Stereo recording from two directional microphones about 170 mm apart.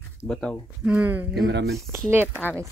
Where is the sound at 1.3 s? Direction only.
80° right.